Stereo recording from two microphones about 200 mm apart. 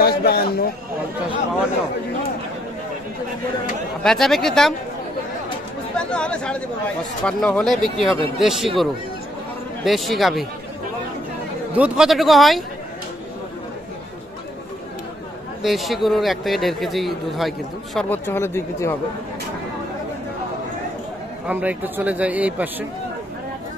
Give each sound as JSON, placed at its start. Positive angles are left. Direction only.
{"t": 0.0, "sound": "a sound", "side_deg": 50}
{"t": 4.0, "sound": "a man's voice", "side_deg": 0}
{"t": 5.9, "sound": "a man's voice", "side_deg": 5}
{"t": 9.8, "sound": "a man's voice", "side_deg": 0}
{"t": 11.7, "sound": "a man's voice", "side_deg": -5}
{"t": 15.6, "sound": "a man's voice", "side_deg": 0}
{"t": 21.5, "sound": "speech", "side_deg": -10}